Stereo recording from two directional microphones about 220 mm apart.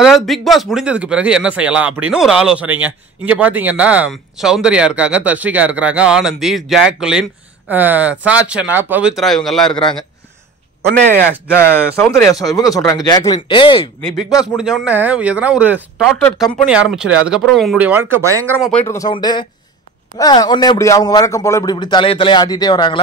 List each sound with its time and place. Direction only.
0.0 s speech: centre (ahead or behind)
10.9 s speech: 50° right (ahead or behind)
12.0 s a man's voice: 15° left (ahead or behind)
14.6 s speech: 5° right (ahead or behind)
18.7 s a man's voice: 10° left (ahead or behind)